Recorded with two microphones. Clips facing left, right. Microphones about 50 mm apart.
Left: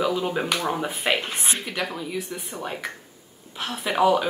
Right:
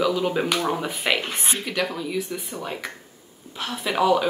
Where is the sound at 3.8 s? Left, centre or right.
Centre.